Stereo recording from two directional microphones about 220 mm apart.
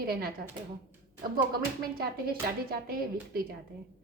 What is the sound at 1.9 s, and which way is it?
A woman's voice, 45° right (ahead or behind).